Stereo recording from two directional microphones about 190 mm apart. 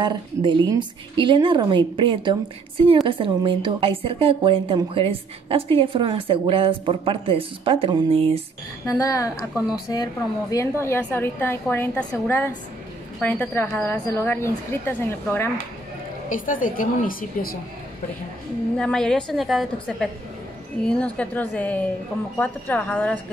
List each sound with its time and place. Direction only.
0.0 s a woman's voice: 25° right (ahead or behind)
8.8 s a woman's voice: 15° left (ahead or behind)
10.5 s a woman's voice: 15° left (ahead or behind)
16.3 s a woman's voice: 45° left (ahead or behind)
18.8 s a woman's voice: 5° left (ahead or behind)